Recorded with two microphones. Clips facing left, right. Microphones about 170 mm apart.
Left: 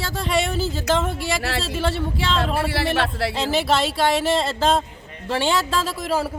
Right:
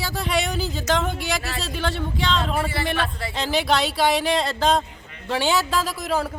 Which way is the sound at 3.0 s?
80° left.